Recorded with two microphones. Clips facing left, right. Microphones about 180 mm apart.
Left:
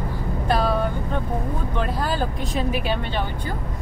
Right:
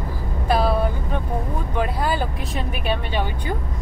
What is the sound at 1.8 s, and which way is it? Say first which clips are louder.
Vehicle: right 3 dB; 10° right (ahead or behind).